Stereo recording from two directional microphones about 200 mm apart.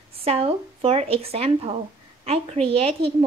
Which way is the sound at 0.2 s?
30° right (ahead or behind).